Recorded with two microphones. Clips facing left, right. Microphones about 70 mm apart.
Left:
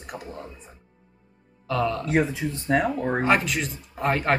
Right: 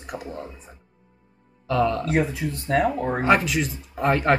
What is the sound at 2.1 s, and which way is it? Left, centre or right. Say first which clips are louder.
Speech: even; left.